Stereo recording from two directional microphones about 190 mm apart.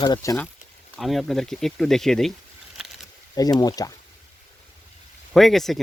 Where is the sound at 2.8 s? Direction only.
5° right (ahead or behind).